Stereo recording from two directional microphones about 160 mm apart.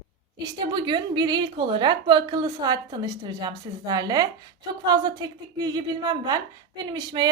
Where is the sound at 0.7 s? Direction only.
30° right (ahead or behind).